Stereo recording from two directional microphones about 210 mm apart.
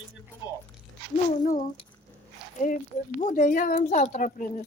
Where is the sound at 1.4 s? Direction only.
40° left (ahead or behind).